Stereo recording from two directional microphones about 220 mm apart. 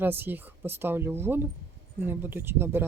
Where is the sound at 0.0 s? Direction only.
10° right (ahead or behind).